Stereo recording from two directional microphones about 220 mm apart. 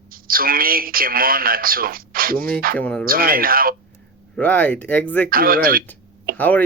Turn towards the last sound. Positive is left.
turn(degrees=5)  # may be behind; listen again after turning